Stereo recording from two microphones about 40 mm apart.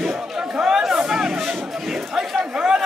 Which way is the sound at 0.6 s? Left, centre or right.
Centre.